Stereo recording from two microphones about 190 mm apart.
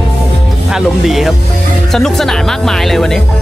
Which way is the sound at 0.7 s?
Centre (ahead or behind).